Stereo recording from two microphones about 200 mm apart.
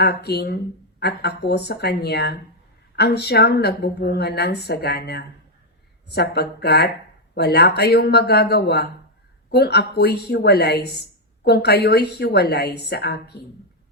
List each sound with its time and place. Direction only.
0.0 s a woman's voice: 55° left (ahead or behind)